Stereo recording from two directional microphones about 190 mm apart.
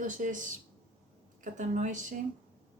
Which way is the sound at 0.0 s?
45° right (ahead or behind).